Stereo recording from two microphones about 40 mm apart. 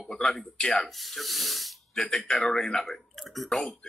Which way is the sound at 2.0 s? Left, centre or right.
Centre.